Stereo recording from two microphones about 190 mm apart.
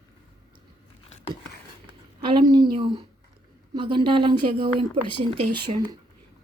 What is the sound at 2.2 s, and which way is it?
Speech, 25° right (ahead or behind).